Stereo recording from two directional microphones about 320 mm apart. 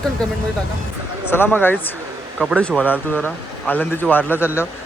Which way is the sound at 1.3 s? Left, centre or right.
Centre.